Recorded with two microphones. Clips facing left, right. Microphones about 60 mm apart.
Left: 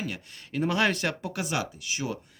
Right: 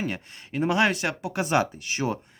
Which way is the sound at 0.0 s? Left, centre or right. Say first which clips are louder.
Right 4 dB; right.